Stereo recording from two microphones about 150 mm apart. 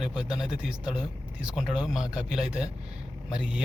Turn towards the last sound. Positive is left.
turn(degrees=-5)  # may be behind; listen again after turning